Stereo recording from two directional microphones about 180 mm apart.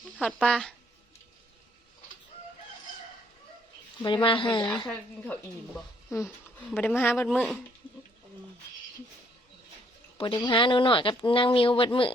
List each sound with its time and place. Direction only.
0.2 s speech: 5° left (ahead or behind)
4.0 s speech: 25° left (ahead or behind)
4.9 s speech: 5° left (ahead or behind)
10.2 s speech: 25° left (ahead or behind)